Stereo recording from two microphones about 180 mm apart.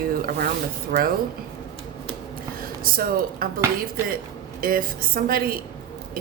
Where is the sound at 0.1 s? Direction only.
55° right (ahead or behind).